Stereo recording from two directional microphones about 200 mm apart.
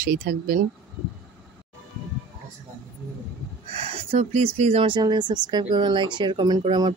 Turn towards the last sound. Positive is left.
turn(degrees=-20)  # may be behind; listen again after turning